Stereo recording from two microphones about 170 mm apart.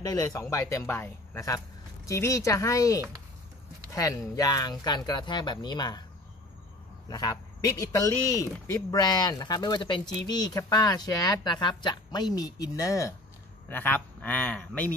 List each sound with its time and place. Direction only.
0.0 s speech: 20° left (ahead or behind)
4.4 s speech: 20° left (ahead or behind)
7.1 s speech: 20° left (ahead or behind)